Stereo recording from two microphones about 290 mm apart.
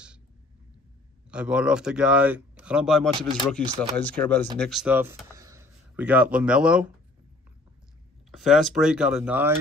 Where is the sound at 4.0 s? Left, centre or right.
Centre.